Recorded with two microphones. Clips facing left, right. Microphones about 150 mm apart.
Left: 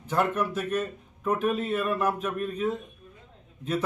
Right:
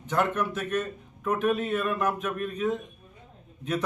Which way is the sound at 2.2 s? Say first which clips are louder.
Left 1 dB; 30° left (ahead or behind).